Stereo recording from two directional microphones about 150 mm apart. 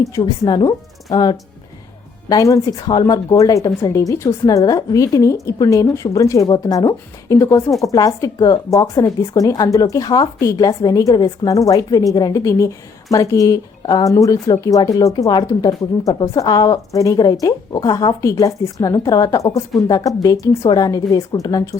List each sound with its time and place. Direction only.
0.0 s speech: 25° left (ahead or behind)